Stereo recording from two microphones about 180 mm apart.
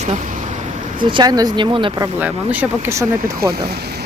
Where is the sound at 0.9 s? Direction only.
25° right (ahead or behind).